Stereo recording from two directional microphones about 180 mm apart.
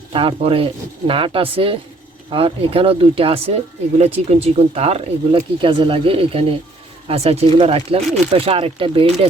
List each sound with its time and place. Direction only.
0.1 s speech: 30° right (ahead or behind)